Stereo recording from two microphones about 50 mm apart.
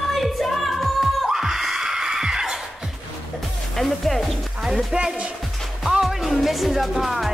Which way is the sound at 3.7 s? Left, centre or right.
Centre.